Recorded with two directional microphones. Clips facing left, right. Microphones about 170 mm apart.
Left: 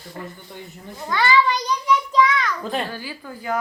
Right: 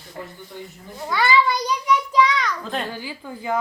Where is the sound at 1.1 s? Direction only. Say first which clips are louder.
Even; 10° right (ahead or behind).